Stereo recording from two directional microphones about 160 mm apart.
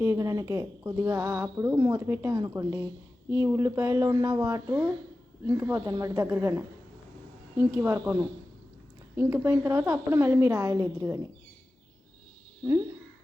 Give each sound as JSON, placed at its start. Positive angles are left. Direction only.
{"t": 0.0, "sound": "a woman's voice", "side_deg": -15}
{"t": 9.1, "sound": "a woman's voice", "side_deg": -15}